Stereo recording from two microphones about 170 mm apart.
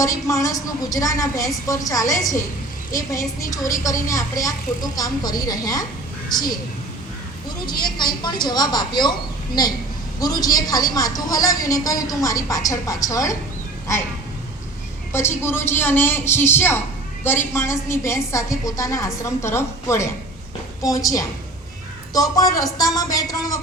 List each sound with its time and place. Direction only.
0.0 s a woman's voice: 20° left (ahead or behind)
7.9 s a woman's voice: 25° left (ahead or behind)
10.2 s a woman's voice: 20° left (ahead or behind)
15.4 s a woman's voice: 15° left (ahead or behind)